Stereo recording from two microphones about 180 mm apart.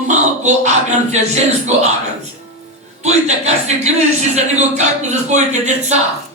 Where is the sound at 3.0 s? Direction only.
40° right (ahead or behind).